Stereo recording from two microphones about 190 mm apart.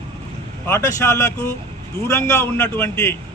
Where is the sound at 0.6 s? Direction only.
15° left (ahead or behind).